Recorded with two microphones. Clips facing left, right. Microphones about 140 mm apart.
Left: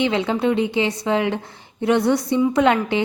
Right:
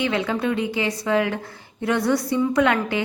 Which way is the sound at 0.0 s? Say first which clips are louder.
Left 3 dB; 25° left (ahead or behind).